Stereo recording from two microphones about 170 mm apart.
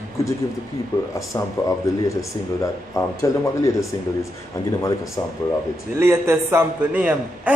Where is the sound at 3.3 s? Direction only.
20° left (ahead or behind).